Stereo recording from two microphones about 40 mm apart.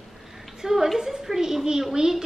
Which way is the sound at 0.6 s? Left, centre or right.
Centre.